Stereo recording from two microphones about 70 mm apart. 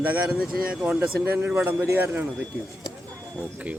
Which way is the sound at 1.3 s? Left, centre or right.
Right.